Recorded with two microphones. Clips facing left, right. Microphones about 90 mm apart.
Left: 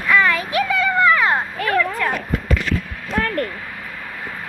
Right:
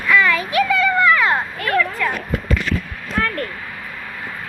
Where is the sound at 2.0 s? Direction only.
45° left (ahead or behind).